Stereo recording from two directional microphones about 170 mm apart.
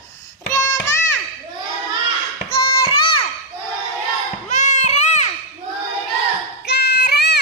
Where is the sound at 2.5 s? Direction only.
30° left (ahead or behind).